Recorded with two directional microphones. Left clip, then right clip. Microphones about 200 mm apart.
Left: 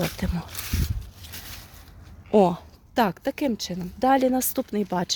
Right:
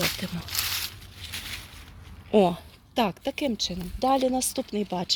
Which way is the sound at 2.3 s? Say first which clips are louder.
Left 2 dB; 15° left (ahead or behind).